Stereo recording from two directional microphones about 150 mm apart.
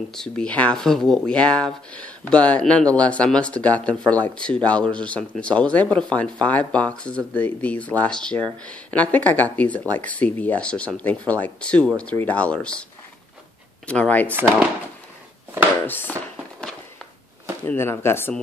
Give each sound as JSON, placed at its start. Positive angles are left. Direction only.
{"t": 0.1, "sound": "speech", "side_deg": 5}
{"t": 13.8, "sound": "speech", "side_deg": 10}
{"t": 15.9, "sound": "speech", "side_deg": 10}
{"t": 17.6, "sound": "speech", "side_deg": 15}